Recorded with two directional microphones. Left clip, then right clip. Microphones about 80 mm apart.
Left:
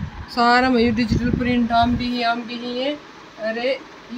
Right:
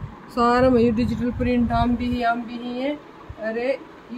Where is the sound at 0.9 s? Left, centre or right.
Centre.